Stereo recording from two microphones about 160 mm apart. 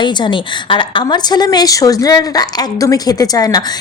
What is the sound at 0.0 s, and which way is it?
A woman's voice, 30° left (ahead or behind).